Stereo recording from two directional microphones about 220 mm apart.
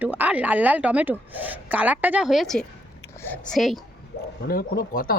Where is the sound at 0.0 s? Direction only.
10° right (ahead or behind).